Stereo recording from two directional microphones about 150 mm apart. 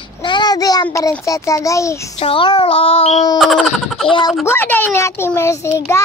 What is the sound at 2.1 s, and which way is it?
Child singing, 40° left (ahead or behind).